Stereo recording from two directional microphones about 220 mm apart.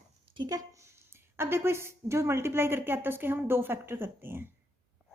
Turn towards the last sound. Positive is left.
turn(degrees=-10)  # may be behind; listen again after turning